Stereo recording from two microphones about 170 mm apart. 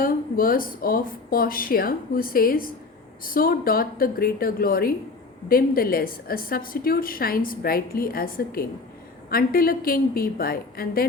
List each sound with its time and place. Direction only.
0.0 s a woman's voice: 55° left (ahead or behind)